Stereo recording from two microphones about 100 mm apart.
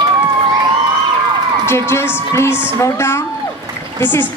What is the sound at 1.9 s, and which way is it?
A woman's voice, 25° left (ahead or behind).